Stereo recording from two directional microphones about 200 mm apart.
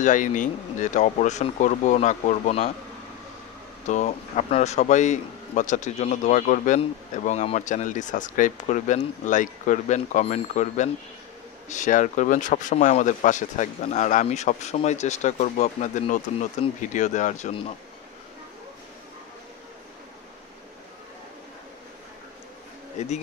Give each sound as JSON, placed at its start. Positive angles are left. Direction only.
{"t": 0.0, "sound": "a man's voice", "side_deg": 40}
{"t": 3.8, "sound": "a man's voice", "side_deg": 35}